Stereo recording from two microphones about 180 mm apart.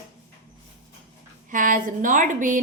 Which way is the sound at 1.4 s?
45° right (ahead or behind).